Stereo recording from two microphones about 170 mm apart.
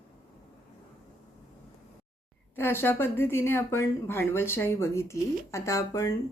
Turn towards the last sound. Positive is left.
turn(degrees=20)  # may be behind; listen again after turning